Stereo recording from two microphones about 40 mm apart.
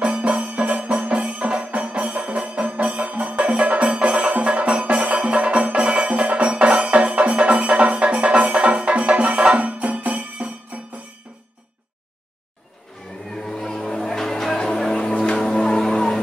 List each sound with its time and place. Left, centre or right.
0.0 s music: right
13.5 s vehicle: centre
15.4 s music: centre